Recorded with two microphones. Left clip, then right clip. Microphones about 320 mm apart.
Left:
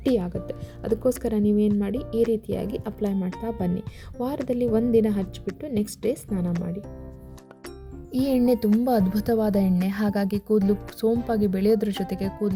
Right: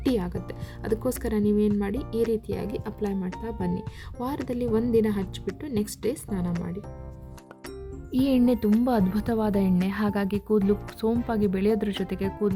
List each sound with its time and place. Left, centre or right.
0.0 s speech: centre
8.1 s speech: left